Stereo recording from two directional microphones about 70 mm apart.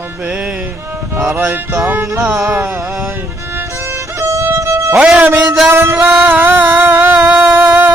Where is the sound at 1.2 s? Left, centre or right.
Right.